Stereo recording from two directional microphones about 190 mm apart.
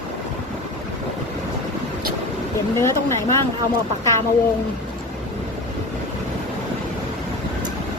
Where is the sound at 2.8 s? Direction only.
15° left (ahead or behind).